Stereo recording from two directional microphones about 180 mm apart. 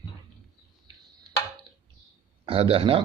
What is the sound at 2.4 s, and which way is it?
Speech, 30° right (ahead or behind).